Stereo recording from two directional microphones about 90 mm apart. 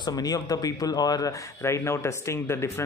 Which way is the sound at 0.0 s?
45° left (ahead or behind).